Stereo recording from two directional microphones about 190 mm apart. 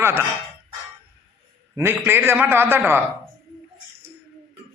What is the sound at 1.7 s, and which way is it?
A man's voice, 10° right (ahead or behind).